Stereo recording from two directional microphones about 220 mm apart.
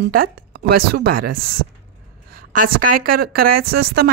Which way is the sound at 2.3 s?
40° right (ahead or behind).